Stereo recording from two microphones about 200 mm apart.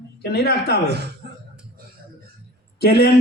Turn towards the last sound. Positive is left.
turn(degrees=55)  # may be behind; listen again after turning